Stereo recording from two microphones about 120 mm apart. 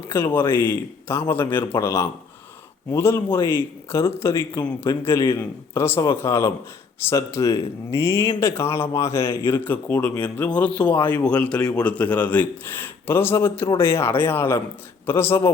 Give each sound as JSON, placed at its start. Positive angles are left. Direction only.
{"t": 0.1, "sound": "speech", "side_deg": 20}